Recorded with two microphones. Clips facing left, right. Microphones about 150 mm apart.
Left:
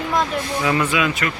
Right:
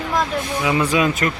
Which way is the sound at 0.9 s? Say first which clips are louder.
Right 3 dB; 40° right (ahead or behind).